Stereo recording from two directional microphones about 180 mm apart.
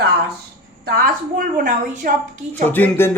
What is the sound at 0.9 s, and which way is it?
A woman's voice, 55° right (ahead or behind).